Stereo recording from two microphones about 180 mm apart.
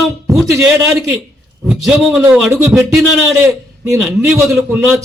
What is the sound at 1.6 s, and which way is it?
A man's voice, centre (ahead or behind).